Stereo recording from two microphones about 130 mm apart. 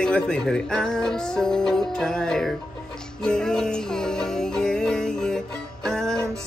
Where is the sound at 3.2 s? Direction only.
5° left (ahead or behind).